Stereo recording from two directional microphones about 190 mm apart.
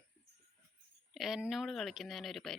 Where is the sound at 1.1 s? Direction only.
Centre (ahead or behind).